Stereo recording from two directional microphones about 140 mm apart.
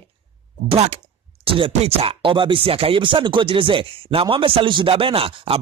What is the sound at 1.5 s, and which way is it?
Speech, 45° right (ahead or behind).